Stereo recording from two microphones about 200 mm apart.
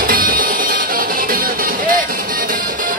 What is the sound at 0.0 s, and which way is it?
Music, 45° right (ahead or behind).